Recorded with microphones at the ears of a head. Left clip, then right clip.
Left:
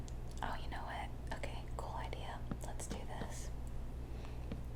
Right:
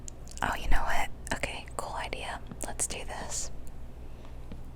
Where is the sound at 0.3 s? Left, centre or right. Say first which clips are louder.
Right 13 dB; right.